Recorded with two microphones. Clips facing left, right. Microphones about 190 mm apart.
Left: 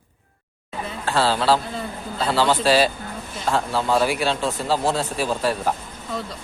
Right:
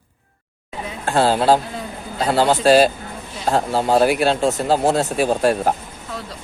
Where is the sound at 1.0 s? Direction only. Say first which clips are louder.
Right 4 dB; 50° right (ahead or behind).